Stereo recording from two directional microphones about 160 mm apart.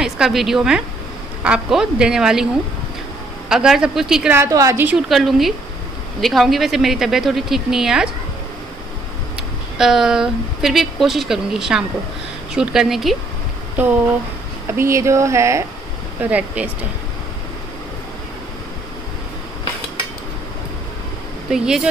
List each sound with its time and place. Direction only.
0.0 s speech: centre (ahead or behind)
3.4 s speech: 5° right (ahead or behind)
4.3 s a woman's voice: 20° right (ahead or behind); by 8.1 s 5° right (ahead or behind)
9.8 s speech: centre (ahead or behind)
14.8 s a woman's voice: 20° right (ahead or behind)
21.5 s speech: 5° right (ahead or behind)